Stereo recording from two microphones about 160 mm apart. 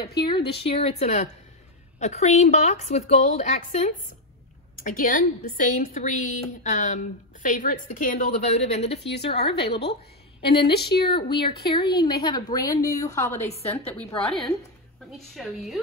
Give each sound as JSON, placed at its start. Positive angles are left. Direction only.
{"t": 0.5, "sound": "a woman's voice", "side_deg": 40}
{"t": 9.0, "sound": "speech", "side_deg": 90}
{"t": 9.3, "sound": "speech", "side_deg": 40}
{"t": 10.6, "sound": "speech", "side_deg": 90}
{"t": 11.0, "sound": "a woman's voice", "side_deg": 30}
{"t": 13.5, "sound": "speech", "side_deg": 40}
{"t": 13.9, "sound": "a woman's voice", "side_deg": 0}